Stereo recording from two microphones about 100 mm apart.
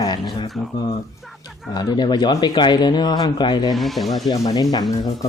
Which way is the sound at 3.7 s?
Centre (ahead or behind).